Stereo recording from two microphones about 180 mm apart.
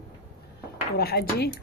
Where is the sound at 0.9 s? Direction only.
60° left (ahead or behind).